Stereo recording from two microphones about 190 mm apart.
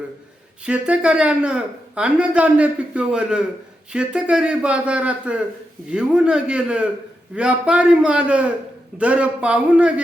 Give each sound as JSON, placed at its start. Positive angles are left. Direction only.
{"t": 0.6, "sound": "a man's voice", "side_deg": -5}